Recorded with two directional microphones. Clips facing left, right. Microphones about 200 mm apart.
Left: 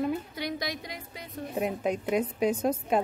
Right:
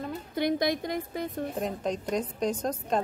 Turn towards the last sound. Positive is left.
turn(degrees=10)  # may be behind; listen again after turning